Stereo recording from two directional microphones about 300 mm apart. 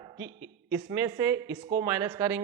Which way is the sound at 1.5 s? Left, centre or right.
Right.